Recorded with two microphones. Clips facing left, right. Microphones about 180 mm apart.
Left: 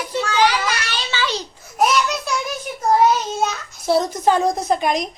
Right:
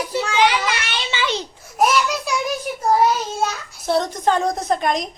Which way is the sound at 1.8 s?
5° right (ahead or behind).